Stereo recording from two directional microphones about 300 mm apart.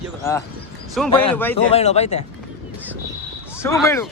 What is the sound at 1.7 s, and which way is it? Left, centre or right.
Speech, left.